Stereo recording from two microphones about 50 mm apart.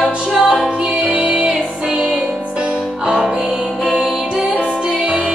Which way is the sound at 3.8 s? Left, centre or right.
Centre.